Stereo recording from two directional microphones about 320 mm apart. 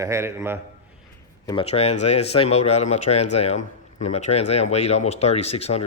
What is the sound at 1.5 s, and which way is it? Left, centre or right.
Speech, centre.